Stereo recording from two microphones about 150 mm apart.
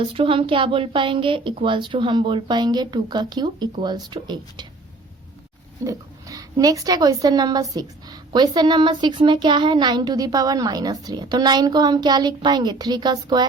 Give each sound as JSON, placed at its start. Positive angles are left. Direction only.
{"t": 0.0, "sound": "a woman's voice", "side_deg": -35}
{"t": 5.8, "sound": "speech", "side_deg": -20}